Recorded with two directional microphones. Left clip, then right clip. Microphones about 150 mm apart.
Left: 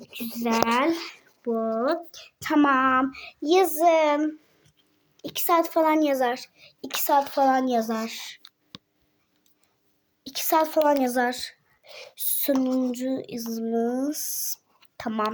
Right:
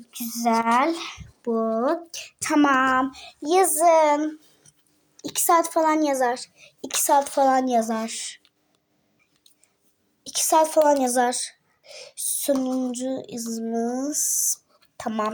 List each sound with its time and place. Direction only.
0.1 s a woman's voice: centre (ahead or behind)
1.4 s speech: 15° right (ahead or behind)
2.7 s speech: 10° left (ahead or behind)
3.0 s a woman's voice: 20° left (ahead or behind); by 8.4 s centre (ahead or behind)
8.4 s a sound: 55° left (ahead or behind)
10.2 s a woman's voice: 5° left (ahead or behind)
11.9 s speech: 15° left (ahead or behind)